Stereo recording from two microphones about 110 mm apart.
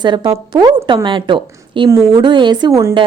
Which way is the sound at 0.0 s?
45° right (ahead or behind).